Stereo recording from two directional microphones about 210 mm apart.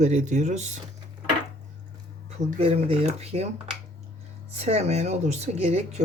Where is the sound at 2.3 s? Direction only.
30° right (ahead or behind).